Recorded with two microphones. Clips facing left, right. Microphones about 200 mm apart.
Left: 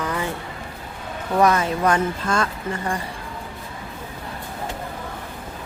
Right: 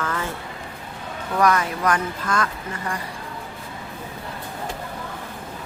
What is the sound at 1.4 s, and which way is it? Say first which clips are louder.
Speech: left 2 dB; 25° left (ahead or behind).